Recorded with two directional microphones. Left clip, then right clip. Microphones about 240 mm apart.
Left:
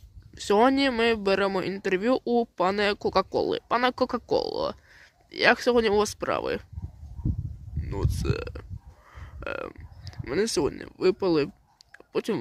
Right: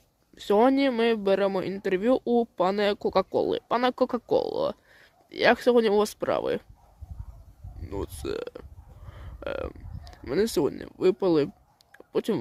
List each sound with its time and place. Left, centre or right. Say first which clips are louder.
0.3 s a man's voice: even; centre
7.8 s a man's voice: left 1 dB; centre
9.0 s a sound: right 1 dB; centre